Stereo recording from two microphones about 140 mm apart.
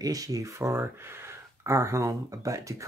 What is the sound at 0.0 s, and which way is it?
Speech, 25° right (ahead or behind).